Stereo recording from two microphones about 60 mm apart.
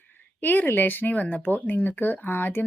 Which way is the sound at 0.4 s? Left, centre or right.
Left.